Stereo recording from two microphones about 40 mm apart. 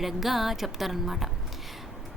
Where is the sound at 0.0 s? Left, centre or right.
Centre.